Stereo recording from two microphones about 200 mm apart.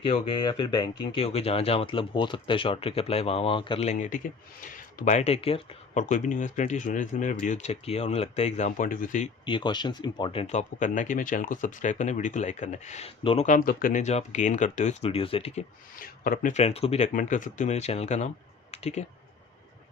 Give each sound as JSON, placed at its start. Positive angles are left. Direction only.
{"t": 0.0, "sound": "speech", "side_deg": 25}
{"t": 9.5, "sound": "speech", "side_deg": 25}
{"t": 16.0, "sound": "speech", "side_deg": 45}